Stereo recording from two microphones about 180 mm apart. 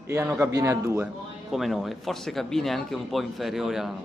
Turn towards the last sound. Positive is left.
turn(degrees=0)  # may be behind; listen again after turning